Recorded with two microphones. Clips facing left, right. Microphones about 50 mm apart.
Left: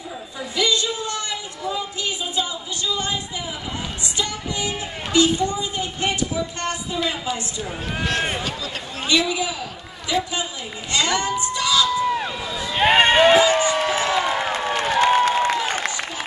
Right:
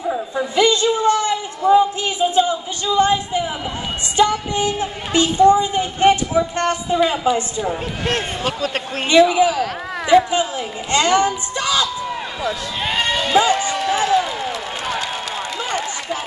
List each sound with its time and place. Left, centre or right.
0.1 s chatter: right
4.2 s female singing: right
4.7 s a sound: right
7.2 s a man's voice: right
8.5 s speech: right
9.0 s a man's voice: right
10.0 s a sound: right
12.8 s run: left
13.5 s a sound: left